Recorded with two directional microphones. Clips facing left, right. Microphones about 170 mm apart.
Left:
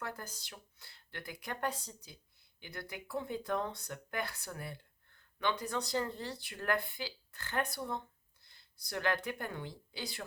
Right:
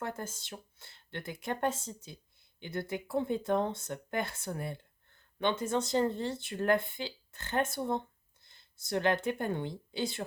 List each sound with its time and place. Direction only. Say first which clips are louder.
0.0 s speech: right 5 dB; 25° right (ahead or behind)